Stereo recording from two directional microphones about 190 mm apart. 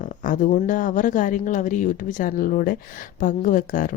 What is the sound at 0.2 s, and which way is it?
Speech, 45° left (ahead or behind).